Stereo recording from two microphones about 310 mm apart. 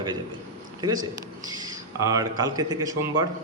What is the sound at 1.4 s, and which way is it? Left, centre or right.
A man's voice, centre.